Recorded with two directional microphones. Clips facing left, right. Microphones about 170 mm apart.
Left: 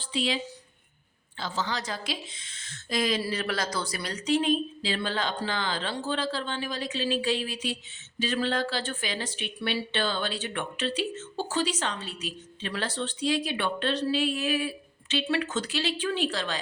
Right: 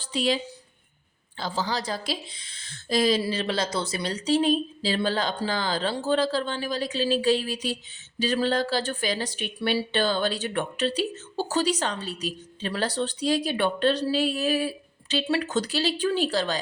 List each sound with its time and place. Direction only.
0.0 s speech: 40° right (ahead or behind)
1.4 s speech: 35° right (ahead or behind)